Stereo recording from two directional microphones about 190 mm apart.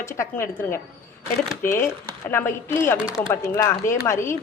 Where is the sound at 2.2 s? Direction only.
10° left (ahead or behind).